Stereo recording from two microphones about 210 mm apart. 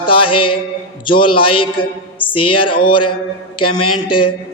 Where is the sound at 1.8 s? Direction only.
25° left (ahead or behind).